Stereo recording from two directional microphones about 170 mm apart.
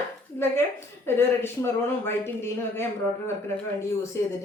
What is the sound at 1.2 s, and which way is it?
Speech, 15° left (ahead or behind).